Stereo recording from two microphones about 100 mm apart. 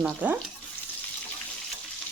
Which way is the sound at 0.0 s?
15° right (ahead or behind).